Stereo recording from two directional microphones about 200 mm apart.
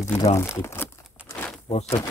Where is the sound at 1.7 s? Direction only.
35° left (ahead or behind).